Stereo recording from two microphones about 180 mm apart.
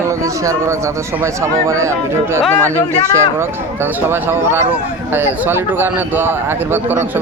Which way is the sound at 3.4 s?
10° right (ahead or behind).